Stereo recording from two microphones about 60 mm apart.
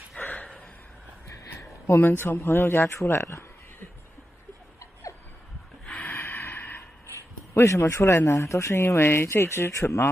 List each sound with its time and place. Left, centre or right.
0.2 s gasp: left
1.2 s a sound: left
1.9 s speech: left
3.1 s speech: left
5.9 s snort: left
7.5 s a man's voice: left
8.8 s speech: left